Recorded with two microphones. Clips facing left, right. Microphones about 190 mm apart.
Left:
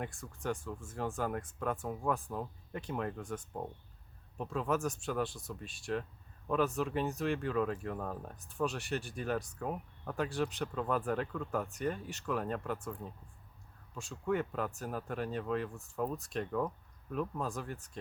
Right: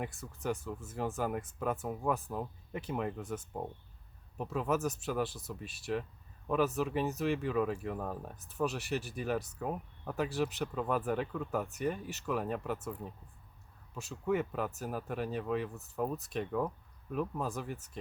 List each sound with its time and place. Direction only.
0.0 s speech: 5° right (ahead or behind)